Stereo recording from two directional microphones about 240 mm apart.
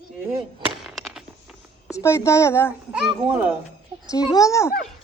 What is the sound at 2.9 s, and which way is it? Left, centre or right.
Speech, centre.